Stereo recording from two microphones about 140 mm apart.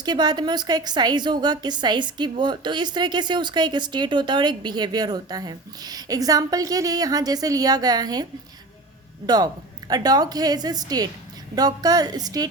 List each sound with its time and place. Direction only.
0.0 s a woman's voice: 30° right (ahead or behind)